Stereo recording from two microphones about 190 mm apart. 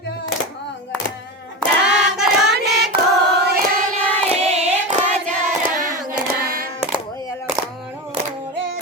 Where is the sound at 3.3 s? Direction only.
55° right (ahead or behind).